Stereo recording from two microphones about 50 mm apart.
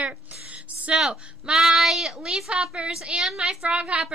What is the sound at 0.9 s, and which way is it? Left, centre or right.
Speech, centre.